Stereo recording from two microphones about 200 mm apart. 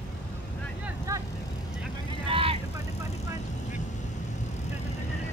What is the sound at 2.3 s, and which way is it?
Vehicle, 30° right (ahead or behind).